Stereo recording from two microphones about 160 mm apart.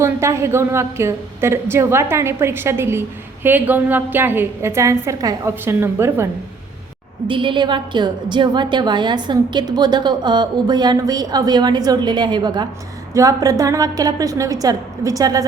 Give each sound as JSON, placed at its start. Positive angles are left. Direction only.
{"t": 0.0, "sound": "a woman's voice", "side_deg": -15}
{"t": 7.3, "sound": "a woman's voice", "side_deg": -30}